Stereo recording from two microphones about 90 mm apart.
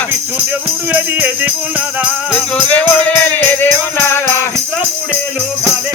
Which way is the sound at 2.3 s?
10° left (ahead or behind).